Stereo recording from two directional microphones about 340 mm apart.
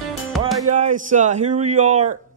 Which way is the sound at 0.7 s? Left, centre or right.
Right.